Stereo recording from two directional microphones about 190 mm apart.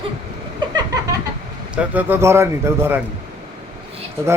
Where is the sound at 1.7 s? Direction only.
10° right (ahead or behind).